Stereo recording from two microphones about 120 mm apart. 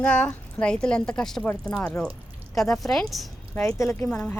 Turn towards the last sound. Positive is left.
turn(degrees=5)  # may be behind; listen again after turning